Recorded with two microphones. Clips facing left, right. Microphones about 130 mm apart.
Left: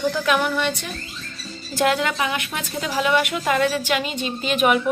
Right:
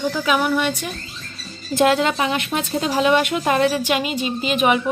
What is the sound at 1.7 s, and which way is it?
A woman's voice, 25° right (ahead or behind).